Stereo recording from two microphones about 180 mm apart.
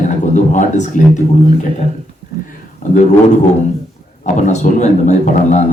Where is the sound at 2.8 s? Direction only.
45° left (ahead or behind).